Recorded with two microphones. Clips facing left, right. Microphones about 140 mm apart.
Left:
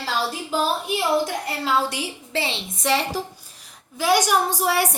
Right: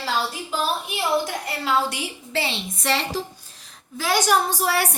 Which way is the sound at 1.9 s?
25° left (ahead or behind).